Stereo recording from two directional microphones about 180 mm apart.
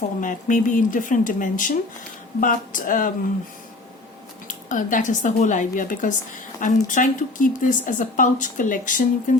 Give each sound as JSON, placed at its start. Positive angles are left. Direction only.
{"t": 0.2, "sound": "speech", "side_deg": 45}
{"t": 4.4, "sound": "speech", "side_deg": 45}